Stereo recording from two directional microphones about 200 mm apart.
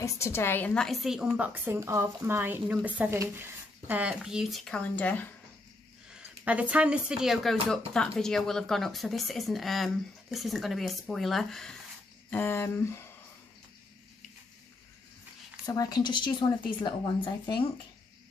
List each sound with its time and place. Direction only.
0.0 s a woman's voice: 15° left (ahead or behind)
6.0 s a woman's voice: 5° right (ahead or behind); by 13.0 s 10° left (ahead or behind)
15.6 s a woman's voice: 20° left (ahead or behind)